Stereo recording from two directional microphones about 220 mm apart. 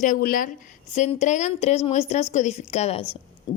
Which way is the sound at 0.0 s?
40° left (ahead or behind).